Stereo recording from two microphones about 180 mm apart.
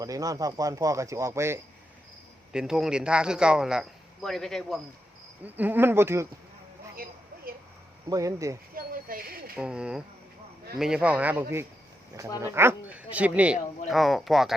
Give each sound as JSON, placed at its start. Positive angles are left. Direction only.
{"t": 0.0, "sound": "speech", "side_deg": -20}
{"t": 2.5, "sound": "a man's voice", "side_deg": -5}
{"t": 5.4, "sound": "speech", "side_deg": -10}
{"t": 6.9, "sound": "a sound", "side_deg": -55}
{"t": 8.1, "sound": "speech", "side_deg": -15}
{"t": 8.7, "sound": "speech", "side_deg": -50}
{"t": 9.6, "sound": "a man's voice", "side_deg": -5}